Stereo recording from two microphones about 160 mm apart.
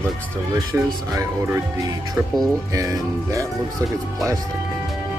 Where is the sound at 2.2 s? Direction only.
Centre (ahead or behind).